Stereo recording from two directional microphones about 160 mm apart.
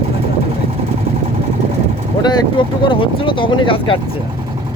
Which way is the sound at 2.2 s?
30° left (ahead or behind).